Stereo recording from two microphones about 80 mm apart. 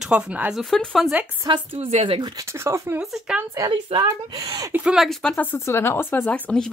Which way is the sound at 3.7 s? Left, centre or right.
Right.